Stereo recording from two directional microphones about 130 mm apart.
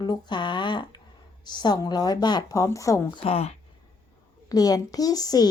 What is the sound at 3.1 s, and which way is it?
Speech, 50° left (ahead or behind).